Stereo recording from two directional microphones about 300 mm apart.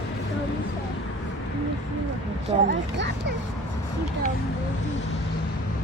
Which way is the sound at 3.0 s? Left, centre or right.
Right.